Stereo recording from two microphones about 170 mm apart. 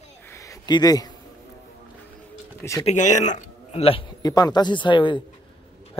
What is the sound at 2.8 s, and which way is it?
Speech, 45° left (ahead or behind).